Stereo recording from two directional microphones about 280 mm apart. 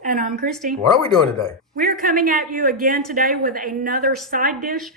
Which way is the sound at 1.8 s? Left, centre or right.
Right.